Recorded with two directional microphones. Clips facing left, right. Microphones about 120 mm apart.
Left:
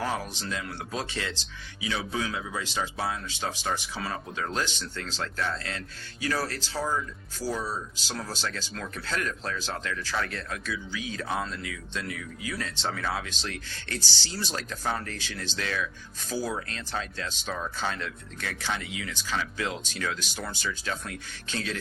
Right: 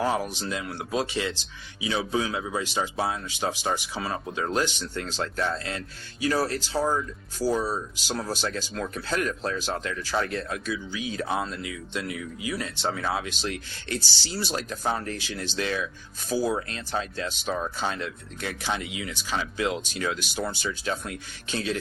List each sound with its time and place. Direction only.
0.0 s speech: 20° right (ahead or behind)
5.2 s speech: 25° right (ahead or behind)
8.0 s speech: 15° right (ahead or behind)
10.2 s speech: 25° right (ahead or behind)